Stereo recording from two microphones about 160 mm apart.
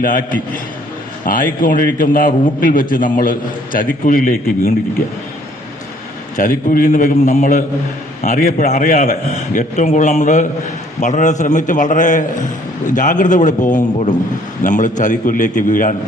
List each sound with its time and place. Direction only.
0.0 s a man's voice: 60° left (ahead or behind)
6.3 s a man's voice: 55° left (ahead or behind)